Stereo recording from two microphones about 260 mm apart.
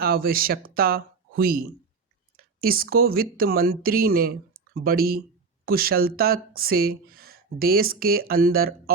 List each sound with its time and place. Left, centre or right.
0.0 s speech: right